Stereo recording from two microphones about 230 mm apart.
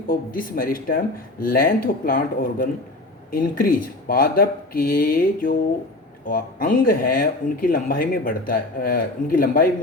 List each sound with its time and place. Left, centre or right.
0.1 s speech: left